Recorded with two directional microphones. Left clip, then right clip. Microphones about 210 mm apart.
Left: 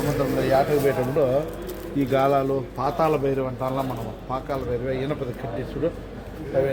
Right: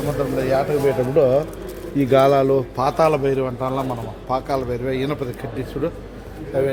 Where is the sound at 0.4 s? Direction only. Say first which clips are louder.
Right 1 dB; 25° right (ahead or behind).